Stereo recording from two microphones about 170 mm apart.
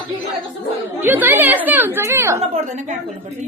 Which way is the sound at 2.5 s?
45° right (ahead or behind).